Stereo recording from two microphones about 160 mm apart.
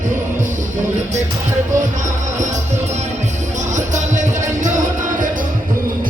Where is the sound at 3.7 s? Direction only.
50° right (ahead or behind).